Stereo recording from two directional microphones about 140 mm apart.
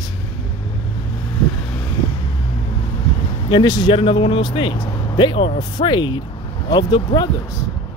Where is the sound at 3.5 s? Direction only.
30° left (ahead or behind).